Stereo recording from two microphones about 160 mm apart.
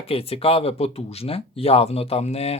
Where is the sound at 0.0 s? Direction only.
35° left (ahead or behind).